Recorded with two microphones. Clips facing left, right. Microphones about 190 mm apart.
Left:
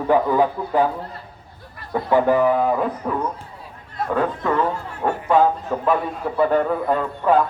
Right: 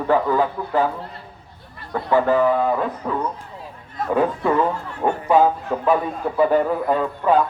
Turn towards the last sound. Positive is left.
turn(degrees=0)  # may be behind; listen again after turning